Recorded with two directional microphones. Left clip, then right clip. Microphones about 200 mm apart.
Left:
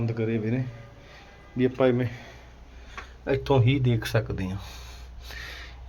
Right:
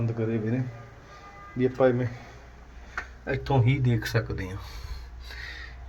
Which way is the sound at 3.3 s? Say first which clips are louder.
Left 4 dB; 20° left (ahead or behind).